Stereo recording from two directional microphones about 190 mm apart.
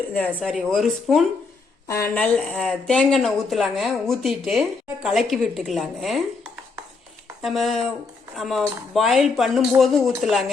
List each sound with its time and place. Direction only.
0.4 s a woman's voice: centre (ahead or behind)
1.9 s a woman's voice: 15° left (ahead or behind)
2.2 s a woman's voice: 5° left (ahead or behind)